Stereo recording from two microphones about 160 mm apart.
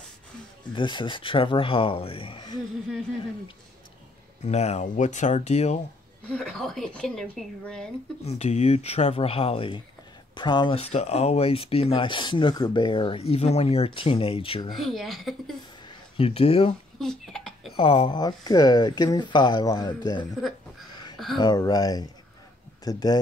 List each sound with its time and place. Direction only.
0.7 s speech: 30° left (ahead or behind)
4.4 s speech: 45° left (ahead or behind)
6.2 s speech: 5° left (ahead or behind)
8.2 s speech: 40° left (ahead or behind)
14.8 s speech: centre (ahead or behind)
16.2 s speech: 35° left (ahead or behind)
17.0 s a sound: 5° left (ahead or behind)
17.7 s speech: 35° left (ahead or behind)
21.4 s speech: 25° left (ahead or behind)